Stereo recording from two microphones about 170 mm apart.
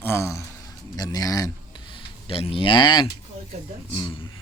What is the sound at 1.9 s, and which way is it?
Speech, 35° left (ahead or behind).